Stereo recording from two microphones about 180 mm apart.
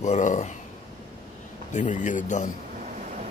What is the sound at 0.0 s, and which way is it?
Speech, 40° left (ahead or behind).